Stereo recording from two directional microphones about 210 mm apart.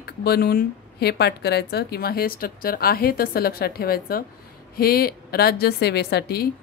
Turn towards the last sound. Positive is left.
turn(degrees=50)  # may be behind; listen again after turning